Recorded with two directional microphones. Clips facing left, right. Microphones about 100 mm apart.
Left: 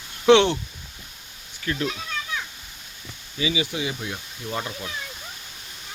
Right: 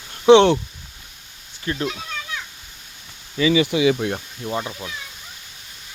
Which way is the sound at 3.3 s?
60° right (ahead or behind).